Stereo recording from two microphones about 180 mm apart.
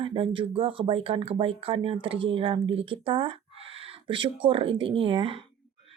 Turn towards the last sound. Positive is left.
turn(degrees=-30)  # may be behind; listen again after turning